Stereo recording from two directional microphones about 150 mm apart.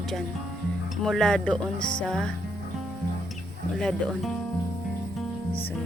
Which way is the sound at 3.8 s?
5° left (ahead or behind).